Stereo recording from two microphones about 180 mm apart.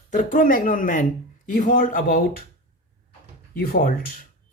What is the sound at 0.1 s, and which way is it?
Speech, 50° left (ahead or behind).